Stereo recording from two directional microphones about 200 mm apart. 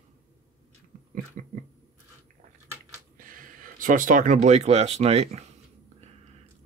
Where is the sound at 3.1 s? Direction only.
45° right (ahead or behind).